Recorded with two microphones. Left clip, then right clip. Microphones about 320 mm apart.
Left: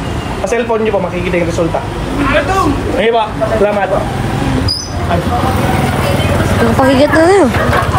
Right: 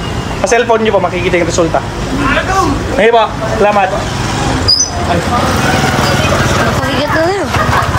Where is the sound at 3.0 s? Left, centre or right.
Right.